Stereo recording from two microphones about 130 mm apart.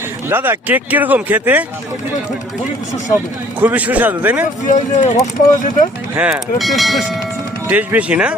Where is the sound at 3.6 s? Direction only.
10° right (ahead or behind).